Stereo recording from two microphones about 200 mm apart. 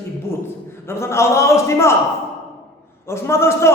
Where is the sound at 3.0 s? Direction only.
15° left (ahead or behind).